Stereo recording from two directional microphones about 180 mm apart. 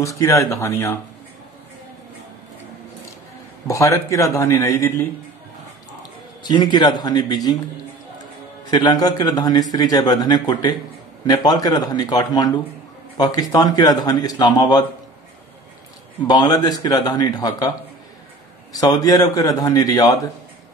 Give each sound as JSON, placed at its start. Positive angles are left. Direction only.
{"t": 0.0, "sound": "speech", "side_deg": 15}
{"t": 3.6, "sound": "speech", "side_deg": 15}
{"t": 6.4, "sound": "a man's voice", "side_deg": 25}
{"t": 8.6, "sound": "a man's voice", "side_deg": 20}
{"t": 16.3, "sound": "a man's voice", "side_deg": 20}
{"t": 18.7, "sound": "a man's voice", "side_deg": 20}